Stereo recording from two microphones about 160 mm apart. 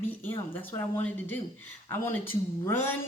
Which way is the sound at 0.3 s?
15° left (ahead or behind).